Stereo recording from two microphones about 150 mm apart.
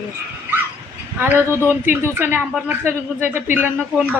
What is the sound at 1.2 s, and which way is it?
A man's voice, 15° right (ahead or behind).